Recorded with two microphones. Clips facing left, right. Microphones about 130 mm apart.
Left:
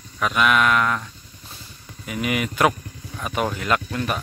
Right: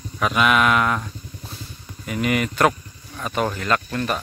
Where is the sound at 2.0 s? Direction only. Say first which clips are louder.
Right 2 dB; 5° left (ahead or behind).